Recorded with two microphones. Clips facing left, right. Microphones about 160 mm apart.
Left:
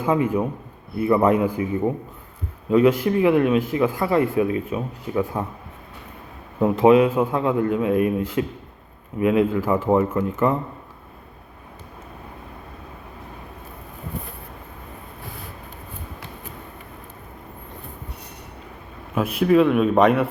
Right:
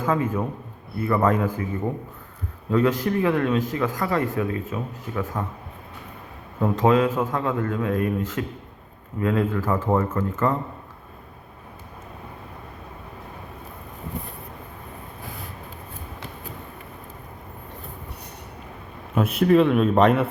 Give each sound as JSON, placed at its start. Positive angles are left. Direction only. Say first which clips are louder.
{"t": 0.0, "sound": "a man's voice", "louder": "left 3 dB", "side_deg": 15}
{"t": 6.6, "sound": "a man's voice", "louder": "left 4 dB", "side_deg": 15}
{"t": 19.1, "sound": "a man's voice", "louder": "left 1 dB", "side_deg": 0}